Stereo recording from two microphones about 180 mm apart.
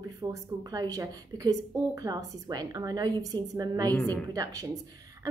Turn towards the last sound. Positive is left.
turn(degrees=-20)  # may be behind; listen again after turning